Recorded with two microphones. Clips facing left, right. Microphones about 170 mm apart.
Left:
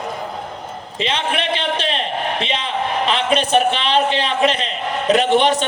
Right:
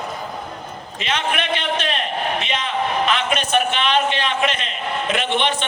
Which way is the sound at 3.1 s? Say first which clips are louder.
Left 4 dB; 30° left (ahead or behind).